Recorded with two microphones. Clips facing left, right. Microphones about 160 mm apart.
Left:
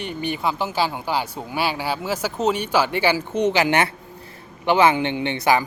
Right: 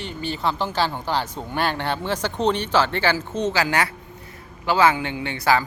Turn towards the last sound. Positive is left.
turn(degrees=20)  # may be behind; listen again after turning